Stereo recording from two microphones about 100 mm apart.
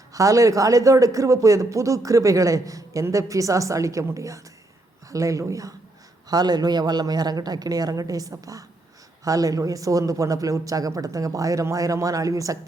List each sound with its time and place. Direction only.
0.1 s speech: 35° right (ahead or behind)